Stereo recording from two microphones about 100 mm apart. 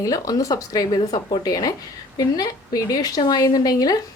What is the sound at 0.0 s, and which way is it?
A woman's voice, 35° left (ahead or behind).